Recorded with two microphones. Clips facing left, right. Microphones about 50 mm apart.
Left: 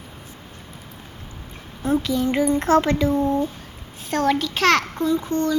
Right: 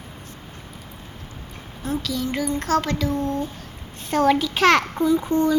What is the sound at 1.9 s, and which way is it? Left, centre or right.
Speech, left.